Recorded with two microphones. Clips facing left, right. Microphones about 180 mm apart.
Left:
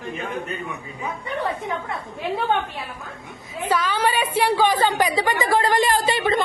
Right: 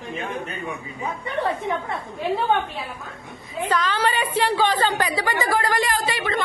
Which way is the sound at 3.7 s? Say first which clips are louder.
Left 1 dB; 10° left (ahead or behind).